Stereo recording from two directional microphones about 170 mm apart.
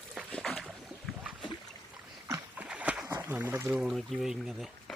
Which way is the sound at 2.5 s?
5° right (ahead or behind).